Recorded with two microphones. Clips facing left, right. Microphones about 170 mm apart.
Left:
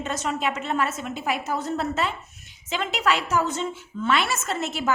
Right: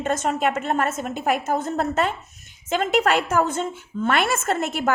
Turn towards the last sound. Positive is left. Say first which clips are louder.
# right 4 dB
turn(degrees=-55)  # may be behind; listen again after turning